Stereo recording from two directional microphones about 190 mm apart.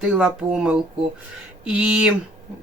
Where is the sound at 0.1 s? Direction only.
5° right (ahead or behind).